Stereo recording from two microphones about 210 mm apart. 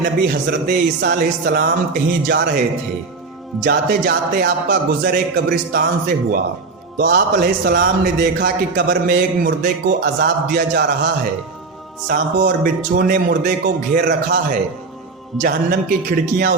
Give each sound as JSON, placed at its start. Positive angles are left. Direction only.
{"t": 0.0, "sound": "a man's voice", "side_deg": -50}
{"t": 3.6, "sound": "a man's voice", "side_deg": -45}
{"t": 12.0, "sound": "a man's voice", "side_deg": -45}